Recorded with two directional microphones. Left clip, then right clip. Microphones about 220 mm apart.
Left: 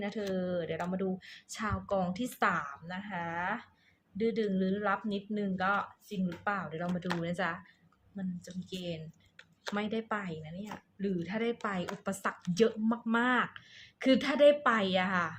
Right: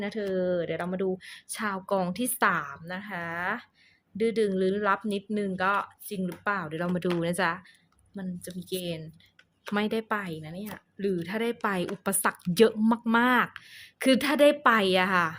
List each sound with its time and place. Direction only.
0.0 s speech: 35° right (ahead or behind)